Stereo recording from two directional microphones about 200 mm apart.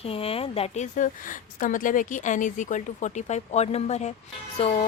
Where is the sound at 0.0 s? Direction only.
30° left (ahead or behind).